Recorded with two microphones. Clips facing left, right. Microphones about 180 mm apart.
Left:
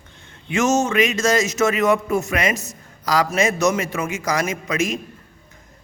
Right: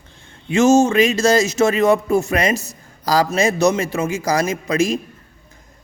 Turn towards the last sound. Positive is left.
turn(degrees=-35)  # may be behind; listen again after turning